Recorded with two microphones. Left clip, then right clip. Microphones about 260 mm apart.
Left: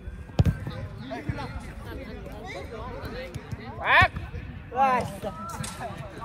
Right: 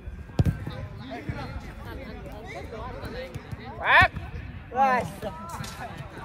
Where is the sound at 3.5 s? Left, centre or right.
Right.